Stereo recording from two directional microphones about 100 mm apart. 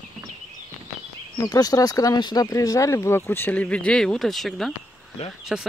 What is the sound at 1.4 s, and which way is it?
Speech, 40° left (ahead or behind).